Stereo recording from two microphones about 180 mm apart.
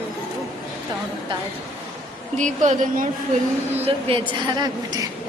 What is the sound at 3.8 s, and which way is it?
A woman's voice, 30° right (ahead or behind).